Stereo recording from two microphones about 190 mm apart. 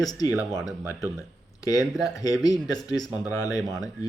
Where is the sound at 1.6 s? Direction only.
20° left (ahead or behind).